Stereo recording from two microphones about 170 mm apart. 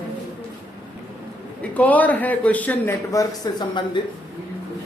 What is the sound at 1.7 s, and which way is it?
Speech, 10° left (ahead or behind).